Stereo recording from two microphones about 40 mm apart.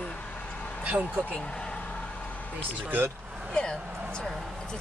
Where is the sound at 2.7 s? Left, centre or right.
Right.